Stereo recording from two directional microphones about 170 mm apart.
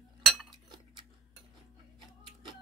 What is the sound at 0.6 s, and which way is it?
Chink, 25° right (ahead or behind).